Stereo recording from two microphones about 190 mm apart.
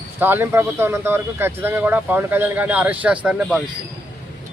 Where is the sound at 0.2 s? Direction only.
10° right (ahead or behind).